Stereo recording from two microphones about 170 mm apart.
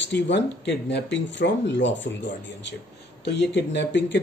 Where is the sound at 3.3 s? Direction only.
90° left.